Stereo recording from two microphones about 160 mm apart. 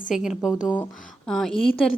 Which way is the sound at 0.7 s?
5° left (ahead or behind).